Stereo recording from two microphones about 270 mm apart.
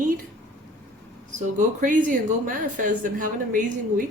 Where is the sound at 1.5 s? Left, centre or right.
Right.